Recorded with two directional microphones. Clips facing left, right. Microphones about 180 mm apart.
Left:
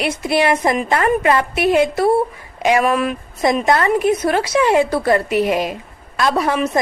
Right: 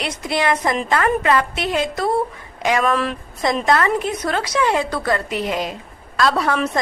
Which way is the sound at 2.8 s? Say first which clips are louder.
Left 2 dB; 5° left (ahead or behind).